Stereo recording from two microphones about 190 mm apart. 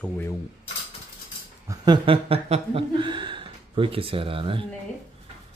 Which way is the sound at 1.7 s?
25° right (ahead or behind).